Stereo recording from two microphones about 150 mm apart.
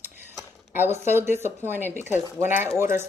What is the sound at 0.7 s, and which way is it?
Speech, 15° right (ahead or behind).